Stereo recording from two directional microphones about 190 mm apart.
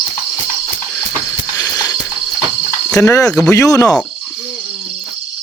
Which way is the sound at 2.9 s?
15° left (ahead or behind).